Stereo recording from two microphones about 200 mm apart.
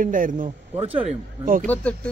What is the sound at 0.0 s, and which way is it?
A man's voice, 40° right (ahead or behind).